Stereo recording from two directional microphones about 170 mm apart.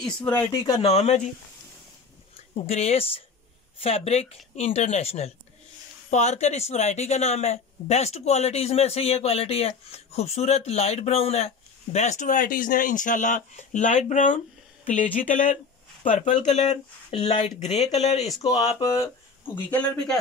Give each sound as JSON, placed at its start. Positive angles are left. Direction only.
{"t": 0.0, "sound": "speech", "side_deg": 5}
{"t": 0.7, "sound": "speech", "side_deg": 35}
{"t": 2.6, "sound": "speech", "side_deg": 40}
{"t": 17.1, "sound": "speech", "side_deg": 30}
{"t": 18.4, "sound": "speech", "side_deg": 25}
{"t": 19.7, "sound": "speech", "side_deg": 5}